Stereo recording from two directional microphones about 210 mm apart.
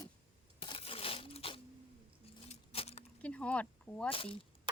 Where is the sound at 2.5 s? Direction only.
30° left (ahead or behind).